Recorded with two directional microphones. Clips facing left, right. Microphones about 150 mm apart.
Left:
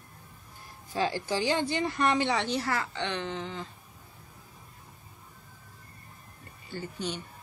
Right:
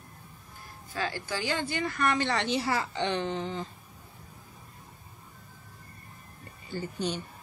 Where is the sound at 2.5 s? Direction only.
10° right (ahead or behind).